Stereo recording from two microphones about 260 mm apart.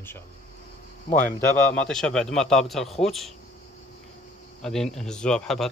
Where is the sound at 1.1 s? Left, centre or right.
Left.